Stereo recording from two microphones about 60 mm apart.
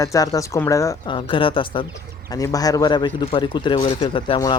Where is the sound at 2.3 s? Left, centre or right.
Left.